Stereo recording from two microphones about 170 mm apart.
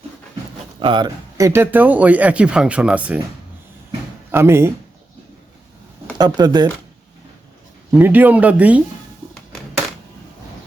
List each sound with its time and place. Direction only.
0.8 s speech: 30° right (ahead or behind); by 3.2 s 10° right (ahead or behind)
4.3 s speech: 15° right (ahead or behind)
6.1 s speech: 25° right (ahead or behind)
7.9 s speech: 10° right (ahead or behind)